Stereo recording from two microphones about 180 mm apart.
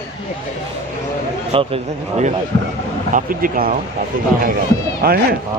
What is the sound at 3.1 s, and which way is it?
Speech, 50° right (ahead or behind).